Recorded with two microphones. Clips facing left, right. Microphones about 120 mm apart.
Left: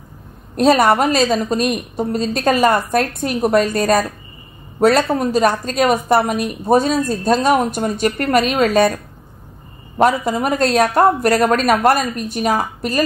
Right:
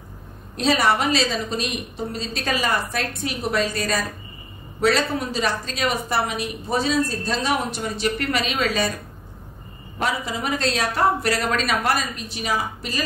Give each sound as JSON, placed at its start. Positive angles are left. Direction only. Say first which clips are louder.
{"t": 0.6, "sound": "a woman's voice", "louder": "left 7 dB", "side_deg": 50}
{"t": 9.9, "sound": "a woman's voice", "louder": "left 10 dB", "side_deg": 50}